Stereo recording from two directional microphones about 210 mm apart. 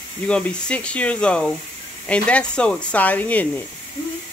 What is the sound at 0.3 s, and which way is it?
Speech, 5° left (ahead or behind).